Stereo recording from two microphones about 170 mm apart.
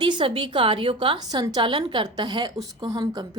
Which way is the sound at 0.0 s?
30° right (ahead or behind).